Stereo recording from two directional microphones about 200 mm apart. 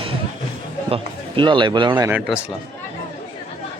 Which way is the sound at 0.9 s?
25° right (ahead or behind).